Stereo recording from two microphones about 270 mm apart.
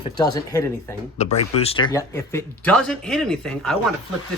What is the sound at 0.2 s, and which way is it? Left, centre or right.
Speech, centre.